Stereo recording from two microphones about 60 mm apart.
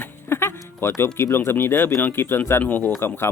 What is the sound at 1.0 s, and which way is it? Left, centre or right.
Speech, left.